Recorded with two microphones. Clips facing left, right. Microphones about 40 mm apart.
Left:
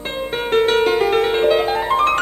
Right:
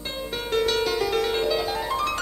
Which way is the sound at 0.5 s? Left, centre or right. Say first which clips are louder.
Left 8 dB; left.